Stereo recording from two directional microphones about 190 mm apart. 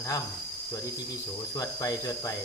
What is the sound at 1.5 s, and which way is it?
Speech, 20° left (ahead or behind).